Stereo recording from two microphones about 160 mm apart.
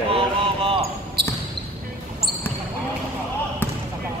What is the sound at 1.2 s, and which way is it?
Basketball bounce, 85° right.